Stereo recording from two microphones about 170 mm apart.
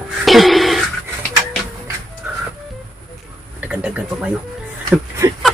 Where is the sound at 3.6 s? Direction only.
10° right (ahead or behind).